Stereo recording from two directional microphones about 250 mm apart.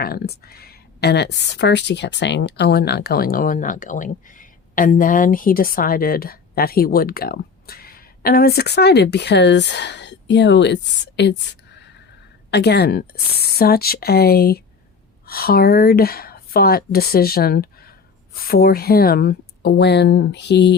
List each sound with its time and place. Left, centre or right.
0.0 s speech: left